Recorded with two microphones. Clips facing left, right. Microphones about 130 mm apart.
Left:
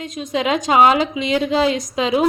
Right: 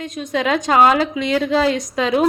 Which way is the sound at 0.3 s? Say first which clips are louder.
Even; 15° left (ahead or behind).